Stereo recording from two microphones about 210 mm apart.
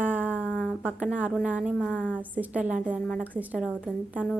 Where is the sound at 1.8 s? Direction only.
5° left (ahead or behind).